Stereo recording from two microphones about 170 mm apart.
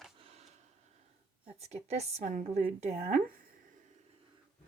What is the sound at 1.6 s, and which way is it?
A woman's voice, 40° right (ahead or behind).